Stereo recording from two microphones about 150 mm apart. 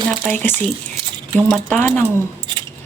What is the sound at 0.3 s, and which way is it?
Speech, 5° left (ahead or behind).